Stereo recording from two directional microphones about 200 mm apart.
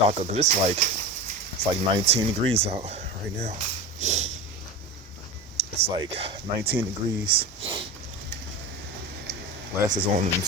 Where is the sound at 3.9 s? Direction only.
35° right (ahead or behind).